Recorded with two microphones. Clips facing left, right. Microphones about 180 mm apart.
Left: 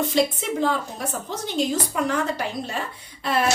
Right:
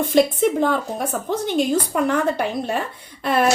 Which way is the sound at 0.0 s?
55° right (ahead or behind).